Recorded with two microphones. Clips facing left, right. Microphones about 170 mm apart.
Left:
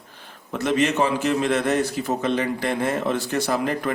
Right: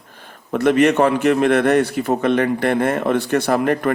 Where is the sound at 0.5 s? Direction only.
60° right (ahead or behind).